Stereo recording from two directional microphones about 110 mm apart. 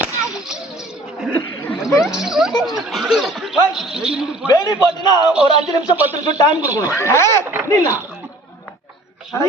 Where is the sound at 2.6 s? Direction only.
Centre (ahead or behind).